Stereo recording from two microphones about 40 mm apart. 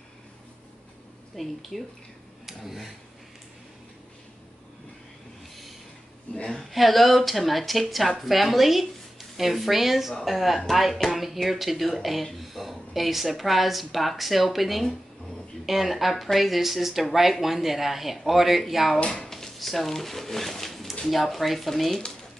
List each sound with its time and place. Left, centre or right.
1.3 s speech: centre
2.4 s a sound: centre
6.3 s a woman's voice: centre
6.7 s speech: centre
19.0 s speech: centre